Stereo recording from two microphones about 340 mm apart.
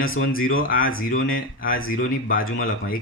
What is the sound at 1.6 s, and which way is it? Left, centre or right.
Speech, left.